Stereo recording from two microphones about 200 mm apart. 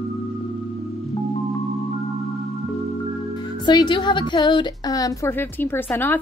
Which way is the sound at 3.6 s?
20° left (ahead or behind).